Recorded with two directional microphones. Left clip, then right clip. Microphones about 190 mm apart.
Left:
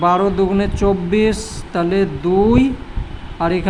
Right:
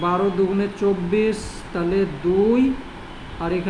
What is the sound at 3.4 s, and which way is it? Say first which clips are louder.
Speech: left 6 dB; 50° left (ahead or behind).